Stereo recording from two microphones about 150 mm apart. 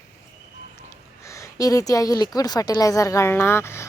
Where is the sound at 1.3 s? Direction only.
20° left (ahead or behind).